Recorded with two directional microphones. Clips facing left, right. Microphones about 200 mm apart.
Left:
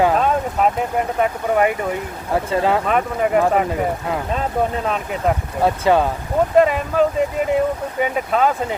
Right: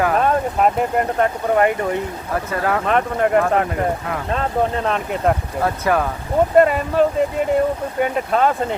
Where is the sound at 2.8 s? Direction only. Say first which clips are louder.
Right 1 dB; 5° left (ahead or behind).